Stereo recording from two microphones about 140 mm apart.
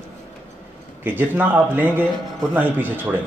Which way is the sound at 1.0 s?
15° right (ahead or behind).